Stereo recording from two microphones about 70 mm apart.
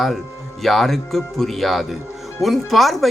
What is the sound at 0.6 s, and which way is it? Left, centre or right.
A man's voice, centre.